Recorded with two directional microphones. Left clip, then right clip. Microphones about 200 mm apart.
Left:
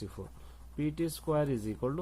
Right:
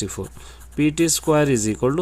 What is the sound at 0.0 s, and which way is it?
Speech, 45° right (ahead or behind).